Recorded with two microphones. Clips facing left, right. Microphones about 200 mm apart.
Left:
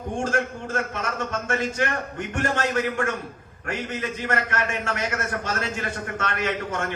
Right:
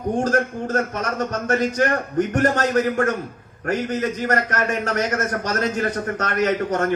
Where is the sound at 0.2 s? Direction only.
40° right (ahead or behind).